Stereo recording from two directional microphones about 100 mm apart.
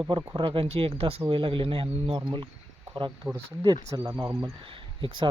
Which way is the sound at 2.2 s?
50° right (ahead or behind).